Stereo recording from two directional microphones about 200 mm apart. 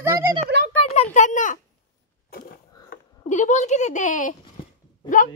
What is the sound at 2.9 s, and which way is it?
A woman's voice, 40° left (ahead or behind).